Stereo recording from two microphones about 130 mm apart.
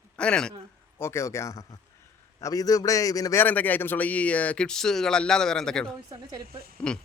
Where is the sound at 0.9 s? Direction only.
20° left (ahead or behind).